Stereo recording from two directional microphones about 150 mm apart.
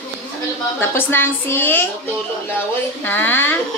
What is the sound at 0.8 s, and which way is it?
A woman's voice, 15° left (ahead or behind).